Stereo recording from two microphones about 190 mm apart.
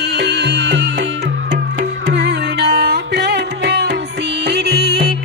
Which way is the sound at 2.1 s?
60° right (ahead or behind).